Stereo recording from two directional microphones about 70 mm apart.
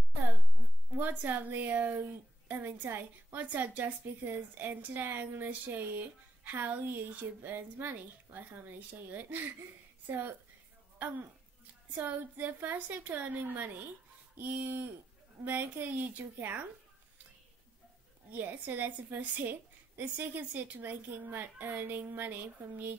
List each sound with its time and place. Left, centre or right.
0.9 s a woman's voice: right
11.9 s a woman's voice: right
18.3 s a woman's voice: right